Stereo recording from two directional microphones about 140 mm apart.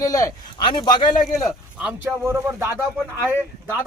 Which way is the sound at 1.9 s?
15° right (ahead or behind).